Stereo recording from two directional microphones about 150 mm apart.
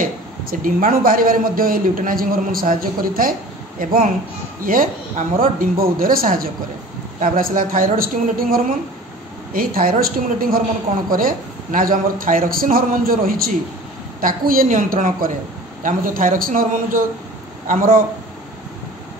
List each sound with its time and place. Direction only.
0.0 s a man's voice: 65° right (ahead or behind)